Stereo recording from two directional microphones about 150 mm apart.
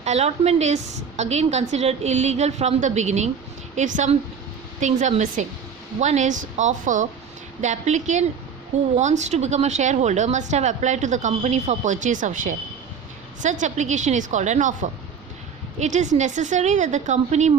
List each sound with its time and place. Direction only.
0.0 s a woman's voice: 45° right (ahead or behind)